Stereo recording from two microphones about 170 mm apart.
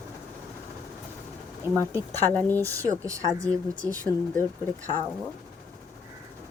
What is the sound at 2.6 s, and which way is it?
Speech, 20° right (ahead or behind).